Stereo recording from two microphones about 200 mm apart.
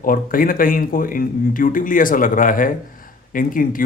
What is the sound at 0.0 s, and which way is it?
Speech, 45° left (ahead or behind).